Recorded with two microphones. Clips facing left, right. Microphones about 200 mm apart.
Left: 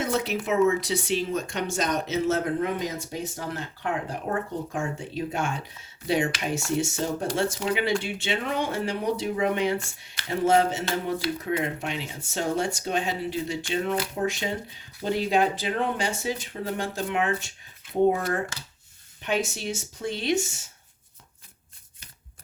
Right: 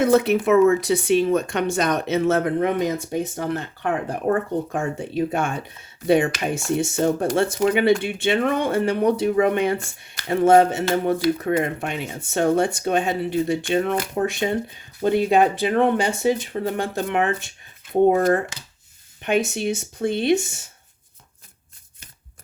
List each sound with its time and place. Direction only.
0.0 s speech: 60° right (ahead or behind)
19.2 s speech: 55° right (ahead or behind)